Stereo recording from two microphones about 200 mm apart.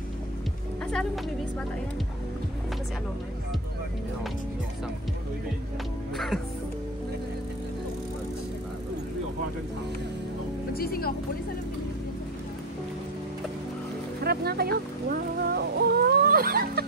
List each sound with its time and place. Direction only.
6.1 s speech: centre (ahead or behind)
10.7 s a woman's voice: 50° left (ahead or behind)
14.2 s music: 50° right (ahead or behind)